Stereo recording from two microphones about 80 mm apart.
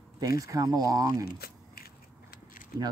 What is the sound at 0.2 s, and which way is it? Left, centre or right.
Speech, right.